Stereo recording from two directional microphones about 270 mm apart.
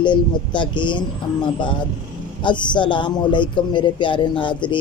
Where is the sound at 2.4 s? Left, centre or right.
Centre.